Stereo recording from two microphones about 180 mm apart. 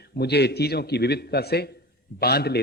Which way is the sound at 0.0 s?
65° left (ahead or behind).